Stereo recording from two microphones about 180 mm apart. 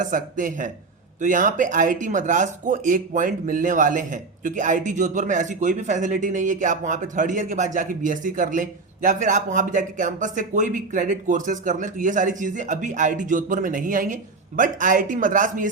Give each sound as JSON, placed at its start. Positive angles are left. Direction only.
{"t": 0.0, "sound": "speech", "side_deg": -50}